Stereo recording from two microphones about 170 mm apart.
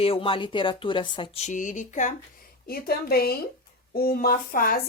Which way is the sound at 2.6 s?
65° left (ahead or behind).